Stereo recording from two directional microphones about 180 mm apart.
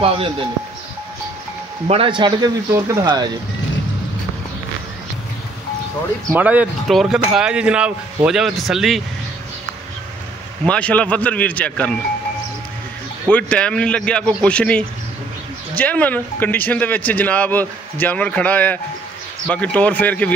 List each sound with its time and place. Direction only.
0.0 s speech: 30° right (ahead or behind)
1.9 s speech: 30° right (ahead or behind)
6.3 s speech: 10° right (ahead or behind)
10.6 s speech: 5° left (ahead or behind)
13.3 s speech: 5° left (ahead or behind)